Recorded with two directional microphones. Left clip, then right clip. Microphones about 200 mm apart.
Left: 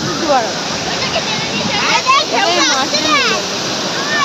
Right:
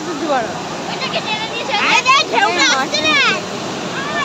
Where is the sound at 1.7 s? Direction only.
50° right (ahead or behind).